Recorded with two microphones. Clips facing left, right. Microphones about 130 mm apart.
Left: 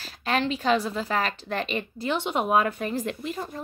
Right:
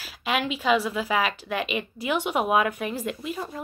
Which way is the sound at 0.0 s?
5° right (ahead or behind).